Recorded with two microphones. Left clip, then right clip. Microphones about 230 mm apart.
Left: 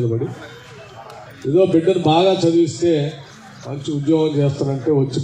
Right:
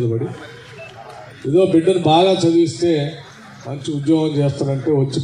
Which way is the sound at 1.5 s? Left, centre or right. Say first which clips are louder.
Right 1 dB; right.